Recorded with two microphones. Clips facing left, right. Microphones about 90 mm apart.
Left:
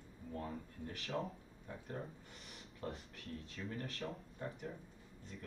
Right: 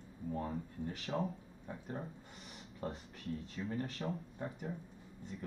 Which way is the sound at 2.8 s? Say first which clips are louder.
Right 3 dB; 35° right (ahead or behind).